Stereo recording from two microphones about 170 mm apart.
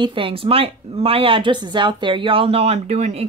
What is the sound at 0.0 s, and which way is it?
Speech, 30° right (ahead or behind).